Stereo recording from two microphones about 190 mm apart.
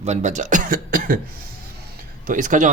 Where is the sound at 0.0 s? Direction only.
40° right (ahead or behind).